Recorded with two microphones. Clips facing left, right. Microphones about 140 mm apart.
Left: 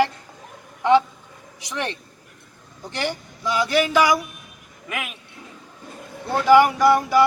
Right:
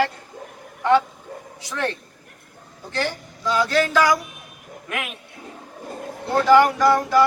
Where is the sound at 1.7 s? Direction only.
15° left (ahead or behind).